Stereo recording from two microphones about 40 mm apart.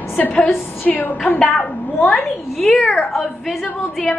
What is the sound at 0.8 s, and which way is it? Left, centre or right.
Speech, left.